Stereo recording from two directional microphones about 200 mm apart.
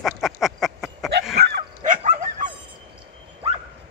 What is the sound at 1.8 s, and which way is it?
Dog, 40° right (ahead or behind).